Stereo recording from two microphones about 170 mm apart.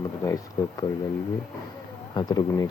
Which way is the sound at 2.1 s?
25° left (ahead or behind).